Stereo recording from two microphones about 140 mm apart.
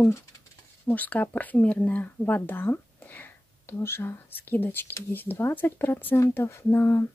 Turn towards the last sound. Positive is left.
turn(degrees=15)  # may be behind; listen again after turning